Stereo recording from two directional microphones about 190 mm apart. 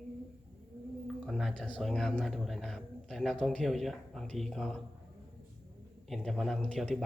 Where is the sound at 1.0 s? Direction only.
Centre (ahead or behind).